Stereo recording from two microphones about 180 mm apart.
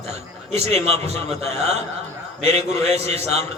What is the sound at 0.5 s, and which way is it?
A man's voice, 35° right (ahead or behind).